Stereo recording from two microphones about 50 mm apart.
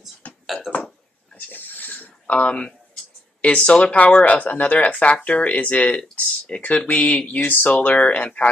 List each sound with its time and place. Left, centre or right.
0.2 s burping: left
1.5 s a sound: left
3.4 s speech: left
6.9 s speech: left